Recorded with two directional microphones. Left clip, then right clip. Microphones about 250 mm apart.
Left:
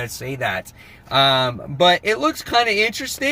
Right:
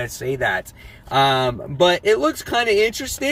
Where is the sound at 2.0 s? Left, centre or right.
Centre.